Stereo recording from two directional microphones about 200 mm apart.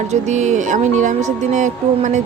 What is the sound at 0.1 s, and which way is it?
A woman's voice, 35° right (ahead or behind).